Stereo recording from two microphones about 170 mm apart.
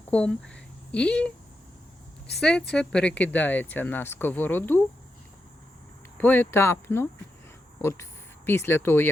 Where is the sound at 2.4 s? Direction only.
5° left (ahead or behind).